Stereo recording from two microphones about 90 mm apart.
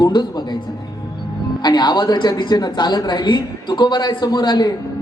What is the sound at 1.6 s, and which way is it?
A man's voice, 55° left (ahead or behind).